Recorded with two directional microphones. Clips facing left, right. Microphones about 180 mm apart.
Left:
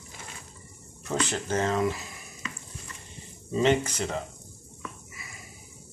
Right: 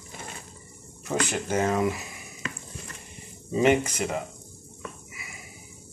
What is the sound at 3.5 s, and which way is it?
Speech, 10° right (ahead or behind).